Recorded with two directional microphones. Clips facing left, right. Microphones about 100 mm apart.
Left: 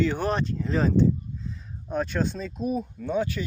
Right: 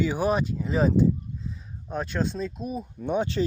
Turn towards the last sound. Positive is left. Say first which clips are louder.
# right 1 dB
turn(degrees=-25)  # may be behind; listen again after turning